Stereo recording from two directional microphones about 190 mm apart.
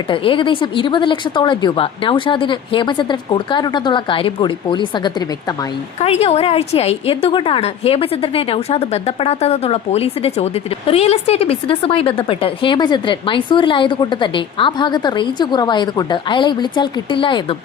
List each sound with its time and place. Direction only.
0.1 s a woman's voice: 25° left (ahead or behind)